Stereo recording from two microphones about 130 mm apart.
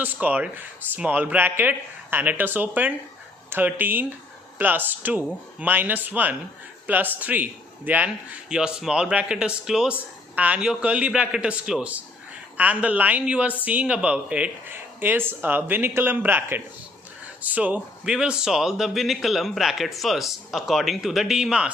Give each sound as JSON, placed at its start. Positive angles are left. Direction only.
{"t": 0.0, "sound": "a man's voice", "side_deg": -15}